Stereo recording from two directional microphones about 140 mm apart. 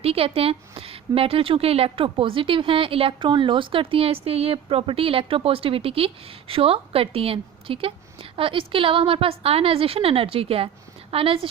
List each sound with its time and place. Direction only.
0.0 s a woman's voice: 45° right (ahead or behind)